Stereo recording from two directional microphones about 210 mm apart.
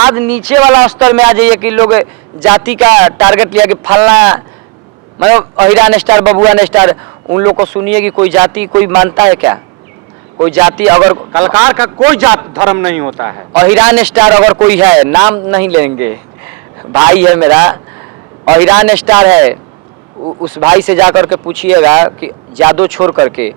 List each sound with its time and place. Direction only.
0.0 s a man's voice: 10° right (ahead or behind)
7.9 s a man's voice: 10° right (ahead or behind)
20.2 s speech: 30° right (ahead or behind)
20.7 s a man's voice: 10° right (ahead or behind)